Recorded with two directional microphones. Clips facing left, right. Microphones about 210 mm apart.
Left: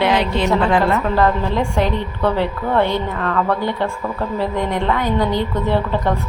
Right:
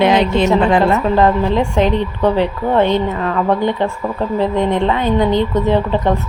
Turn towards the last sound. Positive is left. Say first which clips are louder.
# right 4 dB
turn(degrees=-20)  # may be behind; listen again after turning